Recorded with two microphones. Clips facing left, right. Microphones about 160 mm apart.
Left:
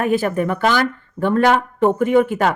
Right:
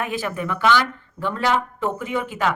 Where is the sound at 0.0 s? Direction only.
50° left (ahead or behind).